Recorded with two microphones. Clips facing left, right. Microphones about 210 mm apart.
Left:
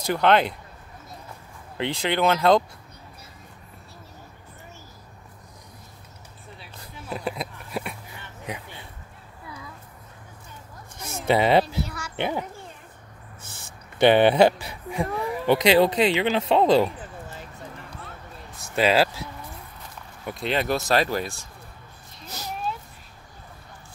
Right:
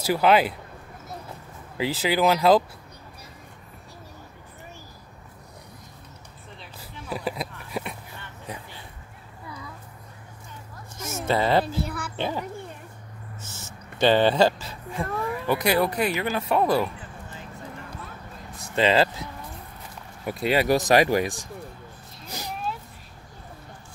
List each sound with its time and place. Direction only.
0.0 s speech: 5° right (ahead or behind)
1.8 s speech: 5° right (ahead or behind)
6.8 s a sound: 5° right (ahead or behind)
11.2 s speech: 20° left (ahead or behind)
11.8 s a sound: 55° right (ahead or behind)
12.2 s speech: 15° left (ahead or behind)
13.9 s speech: 15° left (ahead or behind)
18.6 s a sound: 10° left (ahead or behind)
20.2 s speech: 5° right (ahead or behind)